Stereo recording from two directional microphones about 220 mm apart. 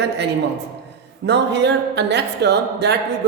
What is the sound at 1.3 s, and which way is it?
Speech, 50° right (ahead or behind).